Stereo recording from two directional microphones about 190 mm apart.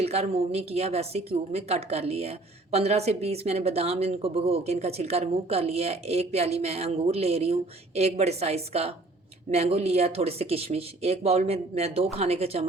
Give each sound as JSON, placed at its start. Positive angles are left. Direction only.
{"t": 0.0, "sound": "speech", "side_deg": -35}